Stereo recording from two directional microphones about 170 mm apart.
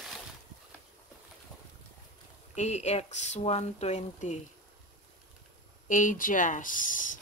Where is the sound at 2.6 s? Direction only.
40° left (ahead or behind).